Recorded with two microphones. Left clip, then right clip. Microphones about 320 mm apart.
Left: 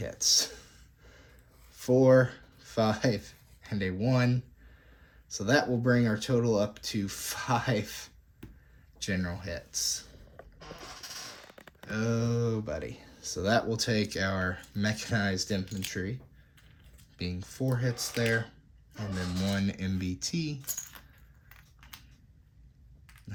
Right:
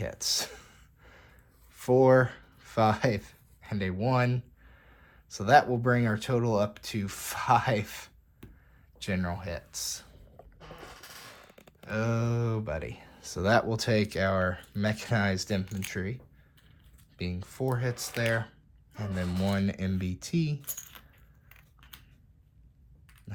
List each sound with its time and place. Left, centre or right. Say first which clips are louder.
0.0 s a sound: left 4 dB; centre
1.7 s speech: right 1 dB; centre
11.9 s speech: right 1 dB; centre